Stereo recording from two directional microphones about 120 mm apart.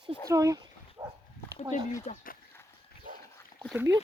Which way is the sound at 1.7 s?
90° left.